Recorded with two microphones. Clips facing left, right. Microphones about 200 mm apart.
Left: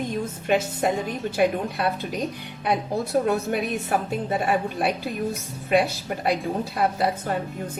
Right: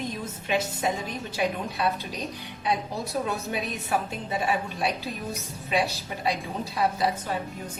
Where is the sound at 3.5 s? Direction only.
55° left (ahead or behind).